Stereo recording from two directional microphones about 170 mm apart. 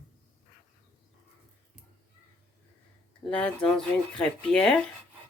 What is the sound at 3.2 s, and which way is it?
Speech, 5° left (ahead or behind).